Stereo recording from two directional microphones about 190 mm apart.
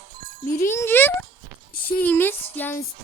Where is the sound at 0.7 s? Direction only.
10° left (ahead or behind).